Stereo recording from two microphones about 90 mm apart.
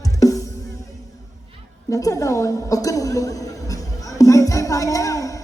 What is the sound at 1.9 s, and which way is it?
A woman's voice, 35° left (ahead or behind).